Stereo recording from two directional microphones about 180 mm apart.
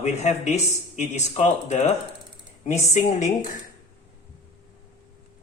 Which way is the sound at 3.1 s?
40° left (ahead or behind).